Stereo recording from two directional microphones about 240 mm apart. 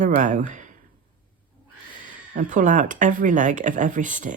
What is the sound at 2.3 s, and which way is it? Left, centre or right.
Speech, right.